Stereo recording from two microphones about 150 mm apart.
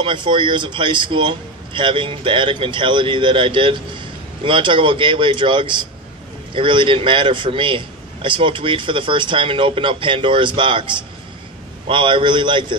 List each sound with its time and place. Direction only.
0.0 s a man's voice: 35° right (ahead or behind)